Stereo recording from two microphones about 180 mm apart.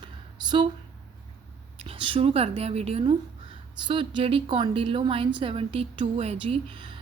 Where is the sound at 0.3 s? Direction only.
25° right (ahead or behind).